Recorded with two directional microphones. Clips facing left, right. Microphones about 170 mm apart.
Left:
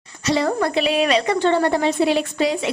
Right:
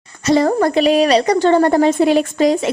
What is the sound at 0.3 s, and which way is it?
A woman's voice, 45° right (ahead or behind).